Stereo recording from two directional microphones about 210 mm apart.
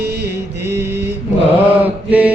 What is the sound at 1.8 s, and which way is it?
Mantra, 5° right (ahead or behind).